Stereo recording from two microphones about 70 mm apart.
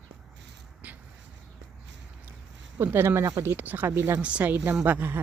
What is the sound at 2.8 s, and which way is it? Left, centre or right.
A woman's voice, right.